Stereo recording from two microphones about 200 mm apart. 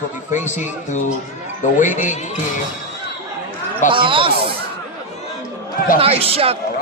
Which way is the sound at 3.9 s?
25° right (ahead or behind).